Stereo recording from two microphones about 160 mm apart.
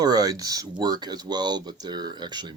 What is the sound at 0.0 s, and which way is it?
Speech, 25° right (ahead or behind).